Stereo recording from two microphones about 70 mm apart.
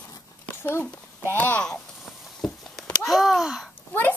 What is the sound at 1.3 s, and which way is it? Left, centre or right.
Speech, left.